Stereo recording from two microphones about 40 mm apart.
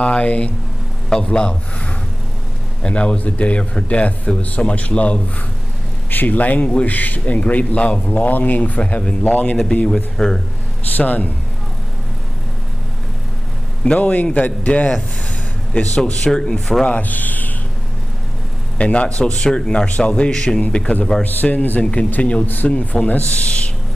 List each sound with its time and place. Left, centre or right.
0.0 s speech: left
6.0 s speech: left
9.8 s speech: centre
11.0 s speech: left
13.9 s speech: left
16.3 s speech: centre
16.8 s speech: left
18.8 s speech: left
21.2 s speech: left
23.0 s speech: left